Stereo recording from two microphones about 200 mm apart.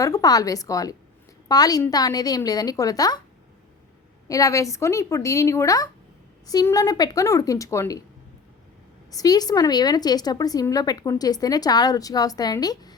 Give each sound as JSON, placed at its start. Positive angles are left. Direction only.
{"t": 0.0, "sound": "a woman's voice", "side_deg": 20}
{"t": 4.3, "sound": "speech", "side_deg": 15}
{"t": 9.1, "sound": "a woman's voice", "side_deg": 20}